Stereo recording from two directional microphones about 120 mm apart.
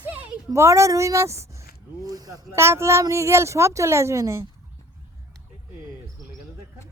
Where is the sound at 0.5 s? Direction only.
25° right (ahead or behind).